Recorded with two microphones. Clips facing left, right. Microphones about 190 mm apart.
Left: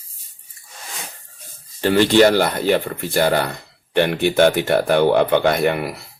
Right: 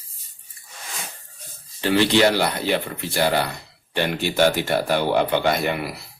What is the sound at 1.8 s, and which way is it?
Speech, 45° left (ahead or behind).